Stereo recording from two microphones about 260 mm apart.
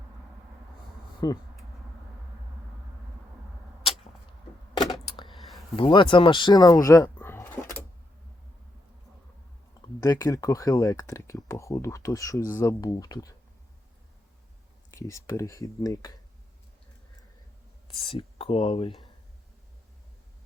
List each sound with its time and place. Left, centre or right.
1.2 s speech: centre
4.8 s a sound: centre
5.5 s speech: centre
10.0 s speech: centre
14.8 s speech: centre
18.0 s speech: left